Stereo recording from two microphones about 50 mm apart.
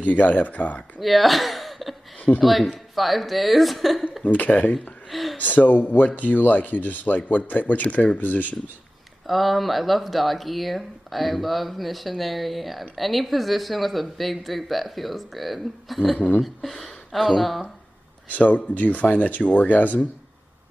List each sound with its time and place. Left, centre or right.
0.0 s speech: left
1.0 s speech: centre
2.1 s a sound: left
2.4 s speech: centre
4.2 s speech: left
5.1 s speech: centre
5.4 s speech: left
9.3 s speech: centre
18.3 s speech: left